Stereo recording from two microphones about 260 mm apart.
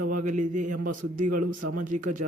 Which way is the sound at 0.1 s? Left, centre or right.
Right.